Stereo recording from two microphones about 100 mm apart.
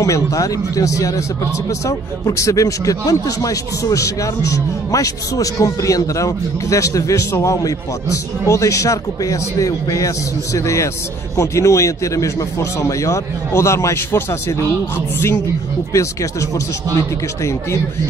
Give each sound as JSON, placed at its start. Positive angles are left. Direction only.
{"t": 0.0, "sound": "speech", "side_deg": 35}
{"t": 15.9, "sound": "speech", "side_deg": 30}